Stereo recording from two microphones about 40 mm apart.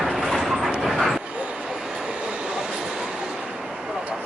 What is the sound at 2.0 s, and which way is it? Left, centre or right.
Train, right.